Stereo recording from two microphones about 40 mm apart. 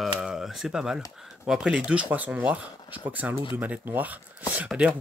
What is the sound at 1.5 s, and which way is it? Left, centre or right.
Speech, centre.